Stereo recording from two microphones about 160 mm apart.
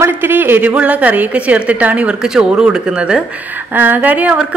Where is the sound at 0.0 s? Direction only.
10° right (ahead or behind).